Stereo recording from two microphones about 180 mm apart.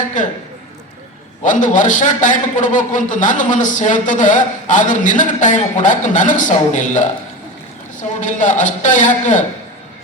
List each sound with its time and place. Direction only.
0.2 s a man's voice: 45° left (ahead or behind)
1.4 s a man's voice: 45° left (ahead or behind)
8.2 s a man's voice: 45° left (ahead or behind)